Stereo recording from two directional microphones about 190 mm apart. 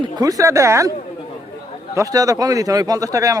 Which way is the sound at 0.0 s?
20° right (ahead or behind).